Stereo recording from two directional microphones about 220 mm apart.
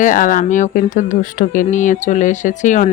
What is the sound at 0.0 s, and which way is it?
Speech, 35° left (ahead or behind).